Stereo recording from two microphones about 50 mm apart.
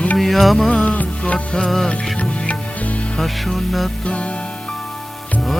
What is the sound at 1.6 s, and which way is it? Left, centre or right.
Music, centre.